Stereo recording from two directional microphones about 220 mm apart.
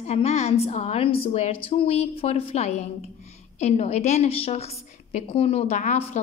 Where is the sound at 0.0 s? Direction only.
30° left (ahead or behind).